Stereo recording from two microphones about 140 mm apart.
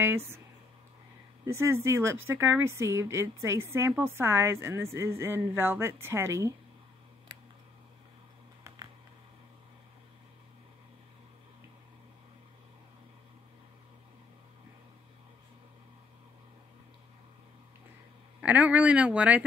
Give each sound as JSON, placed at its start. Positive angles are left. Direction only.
{"t": 0.0, "sound": "a woman's voice", "side_deg": -20}
{"t": 1.4, "sound": "a woman's voice", "side_deg": -20}
{"t": 8.6, "sound": "a sound", "side_deg": -20}
{"t": 18.4, "sound": "a woman's voice", "side_deg": -10}